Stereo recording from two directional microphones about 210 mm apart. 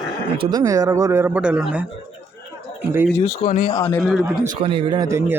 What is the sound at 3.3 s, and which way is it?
Speech, 45° left (ahead or behind).